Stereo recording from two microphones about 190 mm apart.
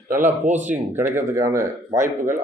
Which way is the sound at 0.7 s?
10° right (ahead or behind).